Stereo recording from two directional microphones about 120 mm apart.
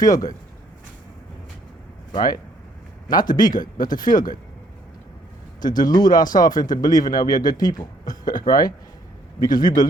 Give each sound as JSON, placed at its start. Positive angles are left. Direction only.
{"t": 0.0, "sound": "speech", "side_deg": 30}
{"t": 2.1, "sound": "a man's voice", "side_deg": 35}
{"t": 5.6, "sound": "a man's voice", "side_deg": 35}